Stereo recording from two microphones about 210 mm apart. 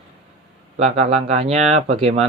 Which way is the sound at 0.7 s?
30° right (ahead or behind).